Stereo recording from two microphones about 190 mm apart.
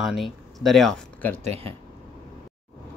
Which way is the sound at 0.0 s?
Centre (ahead or behind).